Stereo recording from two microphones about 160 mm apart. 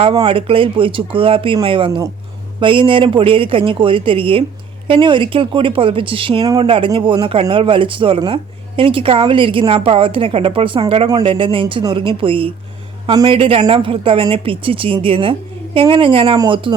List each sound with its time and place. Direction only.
0.0 s speech: 30° right (ahead or behind)